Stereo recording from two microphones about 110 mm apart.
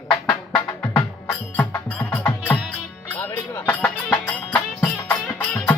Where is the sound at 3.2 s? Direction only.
15° left (ahead or behind).